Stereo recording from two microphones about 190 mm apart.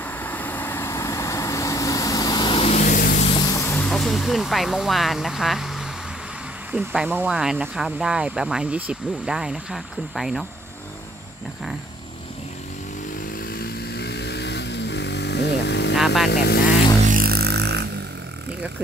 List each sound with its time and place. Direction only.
0.0 s vehicle: 10° left (ahead or behind); by 3.3 s 50° left (ahead or behind)
3.3 s vehicle: 20° left (ahead or behind); by 5.9 s centre (ahead or behind)
6.7 s speech: 5° right (ahead or behind)
13.5 s vehicle: 55° left (ahead or behind)
16.3 s speech: 55° left (ahead or behind)
17.0 s music: 45° right (ahead or behind)